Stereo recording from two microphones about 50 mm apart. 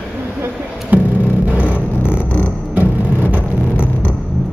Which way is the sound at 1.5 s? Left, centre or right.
Right.